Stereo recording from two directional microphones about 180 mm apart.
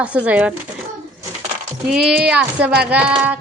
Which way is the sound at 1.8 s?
5° right (ahead or behind).